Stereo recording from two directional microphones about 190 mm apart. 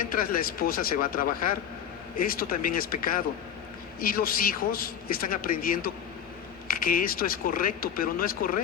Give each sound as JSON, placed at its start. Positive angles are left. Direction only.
{"t": 0.0, "sound": "a man's voice", "side_deg": 50}